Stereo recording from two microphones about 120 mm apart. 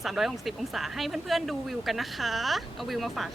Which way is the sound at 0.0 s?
Centre (ahead or behind).